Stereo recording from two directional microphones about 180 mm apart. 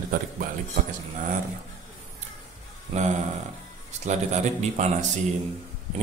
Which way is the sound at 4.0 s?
40° right (ahead or behind).